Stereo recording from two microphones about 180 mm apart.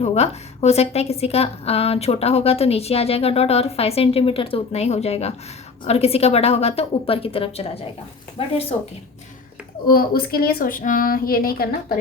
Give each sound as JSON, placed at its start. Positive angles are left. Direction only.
{"t": 0.0, "sound": "a woman's voice", "side_deg": 35}
{"t": 9.8, "sound": "a woman's voice", "side_deg": 55}